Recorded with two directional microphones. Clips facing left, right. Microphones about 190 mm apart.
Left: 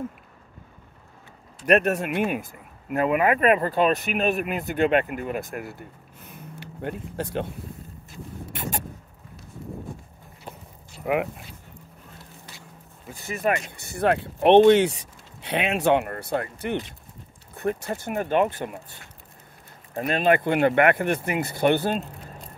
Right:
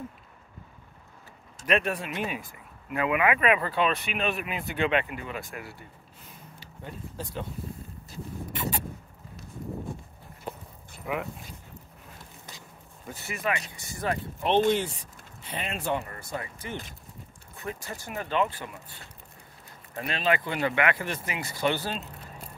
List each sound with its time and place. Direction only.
1.7 s speech: 45° left (ahead or behind); by 7.4 s 65° left (ahead or behind)
8.5 s a sound: 45° left (ahead or behind)
11.1 s speech: 55° left (ahead or behind)
13.3 s speech: 50° left (ahead or behind)
20.0 s speech: 50° left (ahead or behind)